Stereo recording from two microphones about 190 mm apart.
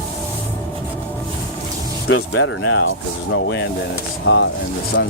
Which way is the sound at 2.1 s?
90° left.